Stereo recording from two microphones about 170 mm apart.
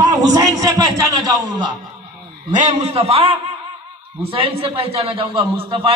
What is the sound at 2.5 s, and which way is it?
Speech, 45° right (ahead or behind).